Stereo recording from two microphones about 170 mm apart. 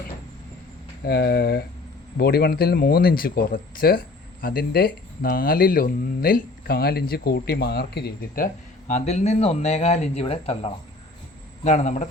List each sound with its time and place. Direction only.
1.0 s speech: 70° left (ahead or behind)
8.9 s speech: 45° left (ahead or behind)